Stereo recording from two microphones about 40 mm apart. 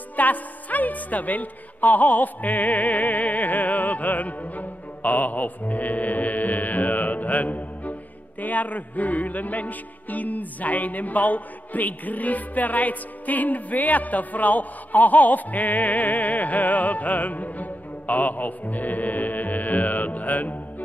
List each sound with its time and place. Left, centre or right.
0.1 s a woman's voice: left
8.4 s music: left